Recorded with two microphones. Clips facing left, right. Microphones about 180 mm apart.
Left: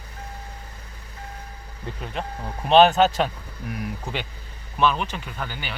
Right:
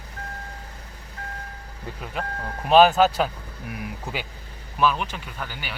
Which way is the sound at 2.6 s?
5° right (ahead or behind).